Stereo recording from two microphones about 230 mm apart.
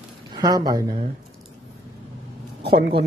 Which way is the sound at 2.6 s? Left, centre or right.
Right.